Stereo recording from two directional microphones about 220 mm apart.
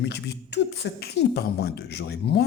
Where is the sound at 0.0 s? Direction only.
50° left (ahead or behind).